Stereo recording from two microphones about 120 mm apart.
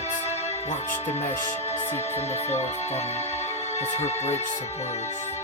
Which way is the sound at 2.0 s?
60° left (ahead or behind).